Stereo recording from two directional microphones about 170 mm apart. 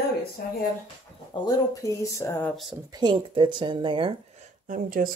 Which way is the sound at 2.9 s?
30° right (ahead or behind).